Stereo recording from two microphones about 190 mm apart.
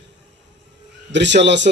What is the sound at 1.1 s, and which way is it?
Speech, 70° right (ahead or behind).